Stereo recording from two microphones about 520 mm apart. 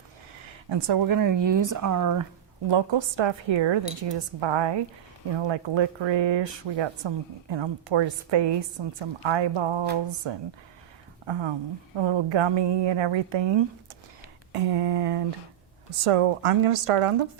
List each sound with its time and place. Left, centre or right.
0.4 s speech: right
2.6 s a woman's voice: right
14.5 s a sound: right
16.0 s a woman's voice: right